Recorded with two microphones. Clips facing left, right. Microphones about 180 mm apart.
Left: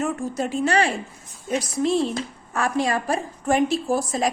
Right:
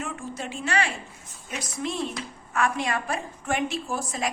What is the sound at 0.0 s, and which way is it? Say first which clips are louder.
A woman's voice: left 9 dB; 40° left (ahead or behind).